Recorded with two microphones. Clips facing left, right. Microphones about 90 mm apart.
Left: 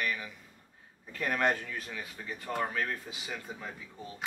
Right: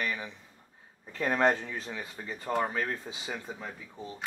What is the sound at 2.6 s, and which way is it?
Speech, 15° right (ahead or behind).